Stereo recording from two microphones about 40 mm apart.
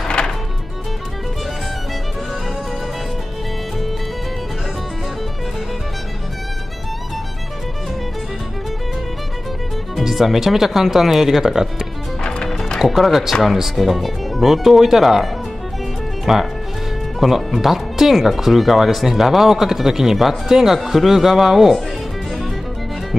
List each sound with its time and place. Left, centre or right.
9.9 s speech: centre
12.2 s music: left
12.8 s speech: centre
16.3 s speech: centre